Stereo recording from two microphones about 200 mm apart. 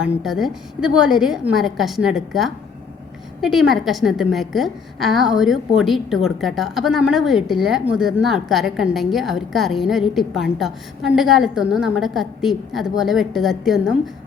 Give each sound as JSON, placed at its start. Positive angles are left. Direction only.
{"t": 0.0, "sound": "a woman's voice", "side_deg": 0}